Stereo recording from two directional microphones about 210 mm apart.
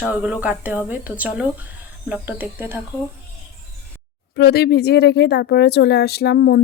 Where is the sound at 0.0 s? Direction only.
5° right (ahead or behind).